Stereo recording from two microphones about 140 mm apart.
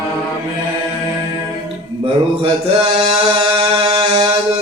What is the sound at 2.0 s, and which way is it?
Mantra, 45° right (ahead or behind).